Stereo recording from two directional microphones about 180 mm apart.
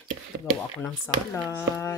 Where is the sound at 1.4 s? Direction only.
15° left (ahead or behind).